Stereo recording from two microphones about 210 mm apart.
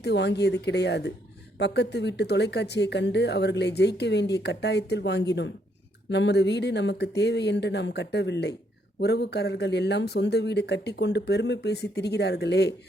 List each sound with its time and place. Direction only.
0.0 s speech: 55° left (ahead or behind)